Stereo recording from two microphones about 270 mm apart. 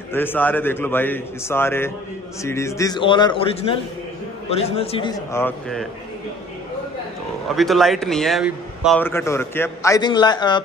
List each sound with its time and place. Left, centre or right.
0.1 s a man's voice: centre
7.4 s a man's voice: centre